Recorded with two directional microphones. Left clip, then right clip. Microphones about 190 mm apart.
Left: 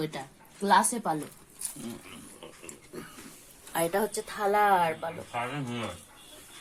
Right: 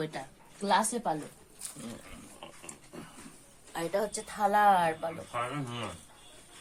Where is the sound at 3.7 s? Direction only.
45° left (ahead or behind).